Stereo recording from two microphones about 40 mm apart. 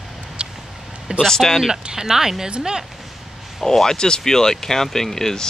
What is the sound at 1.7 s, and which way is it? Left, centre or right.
Speech, centre.